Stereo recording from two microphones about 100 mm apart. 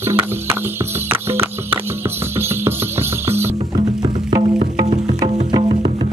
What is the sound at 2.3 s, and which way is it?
Music, 25° right (ahead or behind).